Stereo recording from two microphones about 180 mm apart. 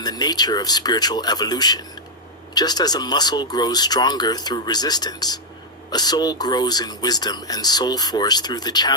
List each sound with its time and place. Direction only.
0.0 s speech: 20° left (ahead or behind)